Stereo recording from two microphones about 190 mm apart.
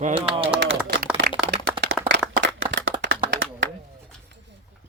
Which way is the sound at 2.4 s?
85° right.